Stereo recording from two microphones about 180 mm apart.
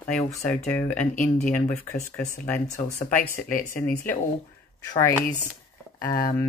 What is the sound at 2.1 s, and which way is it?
Speech, 10° left (ahead or behind).